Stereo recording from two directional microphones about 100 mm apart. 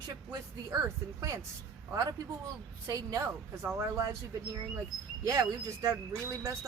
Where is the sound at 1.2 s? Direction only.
30° right (ahead or behind).